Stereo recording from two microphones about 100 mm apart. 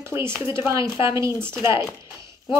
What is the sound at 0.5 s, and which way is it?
Speech, 30° right (ahead or behind).